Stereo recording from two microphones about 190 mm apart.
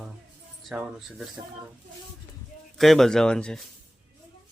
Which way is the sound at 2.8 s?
Centre (ahead or behind).